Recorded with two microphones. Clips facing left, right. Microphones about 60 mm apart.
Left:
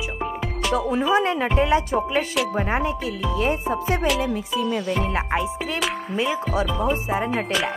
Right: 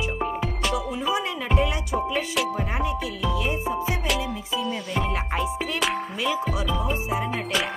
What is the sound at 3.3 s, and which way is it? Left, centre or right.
Speech, left.